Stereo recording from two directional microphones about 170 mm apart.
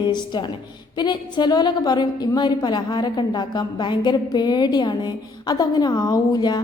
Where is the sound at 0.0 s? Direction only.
25° left (ahead or behind).